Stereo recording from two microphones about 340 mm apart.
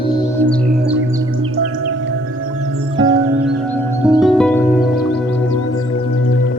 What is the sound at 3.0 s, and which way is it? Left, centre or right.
Music, centre.